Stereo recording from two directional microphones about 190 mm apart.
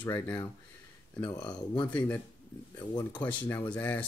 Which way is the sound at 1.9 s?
5° left (ahead or behind).